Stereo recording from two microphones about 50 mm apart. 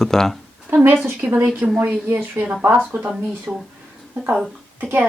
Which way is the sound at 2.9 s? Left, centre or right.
Right.